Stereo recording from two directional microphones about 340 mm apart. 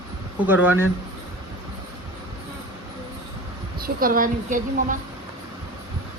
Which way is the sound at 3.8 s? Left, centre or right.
Right.